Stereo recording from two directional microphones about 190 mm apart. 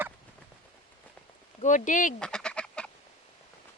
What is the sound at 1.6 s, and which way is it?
Speech, 40° left (ahead or behind).